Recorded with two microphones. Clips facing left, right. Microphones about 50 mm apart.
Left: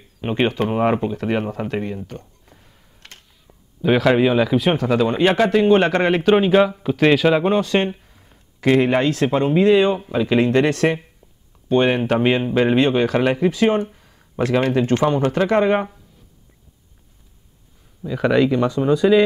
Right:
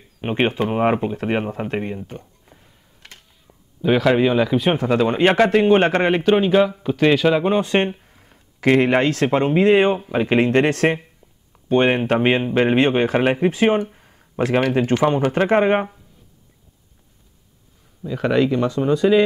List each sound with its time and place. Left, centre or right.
0.2 s speech: right
2.4 s computer keyboard: centre
4.7 s speech: right
5.7 s speech: right
6.3 s speech: centre
7.6 s speech: right
9.4 s speech: right
13.9 s a sound: right
14.9 s speech: right
18.1 s speech: centre